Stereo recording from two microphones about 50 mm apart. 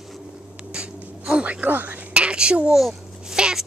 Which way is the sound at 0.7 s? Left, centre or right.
Right.